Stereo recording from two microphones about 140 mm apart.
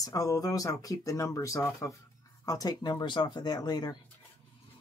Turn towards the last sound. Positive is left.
turn(degrees=30)  # may be behind; listen again after turning